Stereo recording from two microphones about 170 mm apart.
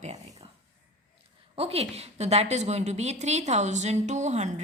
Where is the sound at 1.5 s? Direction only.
35° right (ahead or behind).